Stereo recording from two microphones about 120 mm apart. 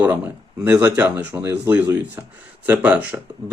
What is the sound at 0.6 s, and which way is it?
Speech, 10° right (ahead or behind).